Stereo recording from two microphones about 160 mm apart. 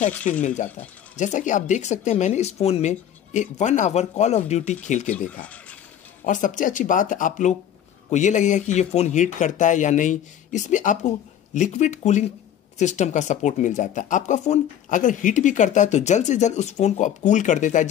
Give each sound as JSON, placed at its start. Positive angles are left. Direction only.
{"t": 0.3, "sound": "speech", "side_deg": 55}
{"t": 5.1, "sound": "speech", "side_deg": 10}
{"t": 6.2, "sound": "speech", "side_deg": 55}